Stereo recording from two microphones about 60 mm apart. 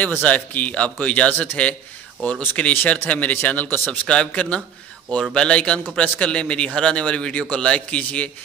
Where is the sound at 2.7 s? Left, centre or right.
Left.